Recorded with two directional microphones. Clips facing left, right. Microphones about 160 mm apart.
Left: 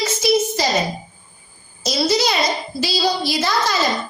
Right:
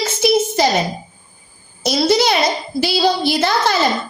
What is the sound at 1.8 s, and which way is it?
A woman's voice, 55° right (ahead or behind).